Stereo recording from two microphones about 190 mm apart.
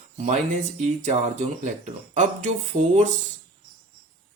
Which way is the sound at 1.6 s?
40° right (ahead or behind).